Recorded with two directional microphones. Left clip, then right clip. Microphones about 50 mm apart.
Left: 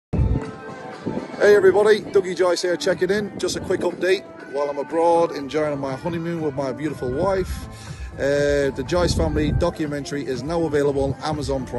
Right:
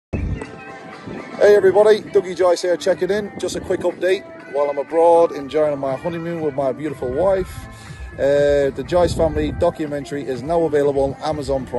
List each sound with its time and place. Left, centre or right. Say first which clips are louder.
1.3 s a man's voice: right 2 dB; left
8.2 s a man's voice: right 4 dB; left